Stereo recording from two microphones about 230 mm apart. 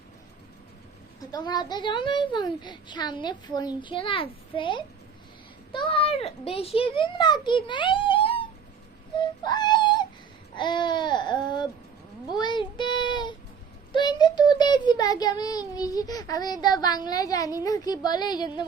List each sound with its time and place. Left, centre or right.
1.2 s a child's voice: centre
9.1 s baby cry: centre
10.5 s speech: centre
12.3 s child singing: centre
13.9 s a child's voice: centre